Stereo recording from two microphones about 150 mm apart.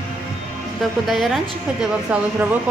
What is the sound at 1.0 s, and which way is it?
A woman's voice, centre (ahead or behind).